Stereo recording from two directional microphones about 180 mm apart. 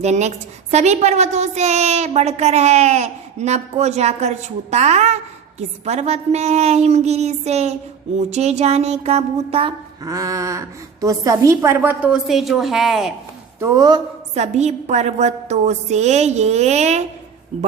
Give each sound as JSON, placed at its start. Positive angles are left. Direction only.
{"t": 0.0, "sound": "a woman's voice", "side_deg": -40}
{"t": 10.0, "sound": "a woman's voice", "side_deg": -20}
{"t": 13.6, "sound": "speech", "side_deg": -20}
{"t": 14.3, "sound": "a woman's voice", "side_deg": -40}